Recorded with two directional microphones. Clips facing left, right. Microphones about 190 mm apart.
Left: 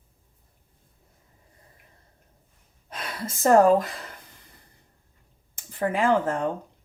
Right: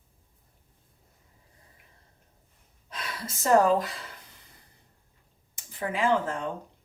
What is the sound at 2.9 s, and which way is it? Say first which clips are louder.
Speech: left 4 dB; 50° left (ahead or behind).